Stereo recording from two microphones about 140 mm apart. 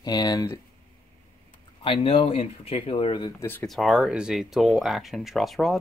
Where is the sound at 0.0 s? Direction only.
30° left (ahead or behind).